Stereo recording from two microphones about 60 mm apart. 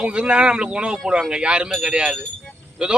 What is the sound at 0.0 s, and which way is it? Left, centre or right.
Speech, centre.